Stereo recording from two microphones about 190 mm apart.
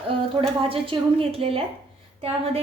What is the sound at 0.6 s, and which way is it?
A woman's voice, 30° right (ahead or behind).